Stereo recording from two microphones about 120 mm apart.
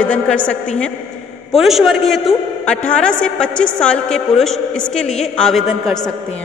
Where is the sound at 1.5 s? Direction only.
Centre (ahead or behind).